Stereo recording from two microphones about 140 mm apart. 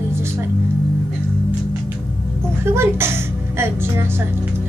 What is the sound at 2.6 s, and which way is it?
A woman's voice, 20° right (ahead or behind).